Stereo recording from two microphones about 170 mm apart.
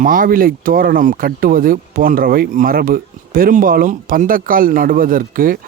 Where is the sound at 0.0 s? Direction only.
55° right (ahead or behind).